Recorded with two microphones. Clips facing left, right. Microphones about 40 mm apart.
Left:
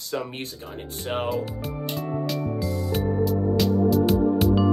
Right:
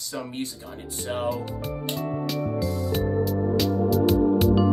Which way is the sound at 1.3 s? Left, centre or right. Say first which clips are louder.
Left 2 dB; centre.